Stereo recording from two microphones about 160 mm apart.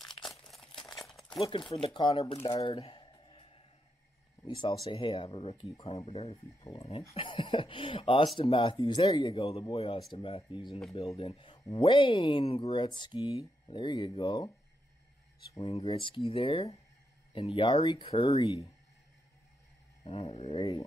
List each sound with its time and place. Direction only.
0.7 s a sound: centre (ahead or behind)
1.4 s speech: 35° left (ahead or behind)
2.4 s speech: 25° left (ahead or behind)
2.7 s a sound: 35° left (ahead or behind)
4.6 s speech: 35° left (ahead or behind)
14.2 s speech: 25° left (ahead or behind)
15.6 s speech: 40° left (ahead or behind)
20.0 s speech: 35° left (ahead or behind)